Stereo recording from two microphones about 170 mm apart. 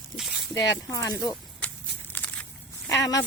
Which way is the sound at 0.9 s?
20° left (ahead or behind).